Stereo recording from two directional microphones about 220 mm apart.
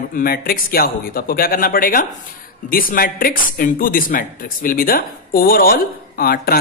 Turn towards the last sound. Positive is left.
turn(degrees=40)  # may be behind; listen again after turning